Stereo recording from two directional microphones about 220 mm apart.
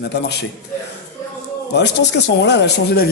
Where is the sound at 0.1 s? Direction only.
50° left (ahead or behind).